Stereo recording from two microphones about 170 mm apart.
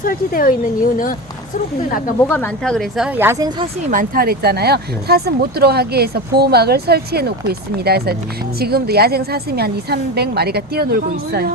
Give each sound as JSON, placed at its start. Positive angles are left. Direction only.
{"t": 0.0, "sound": "speech", "side_deg": 55}
{"t": 2.2, "sound": "speech", "side_deg": 10}
{"t": 2.7, "sound": "a woman's voice", "side_deg": -5}
{"t": 3.8, "sound": "speech", "side_deg": -55}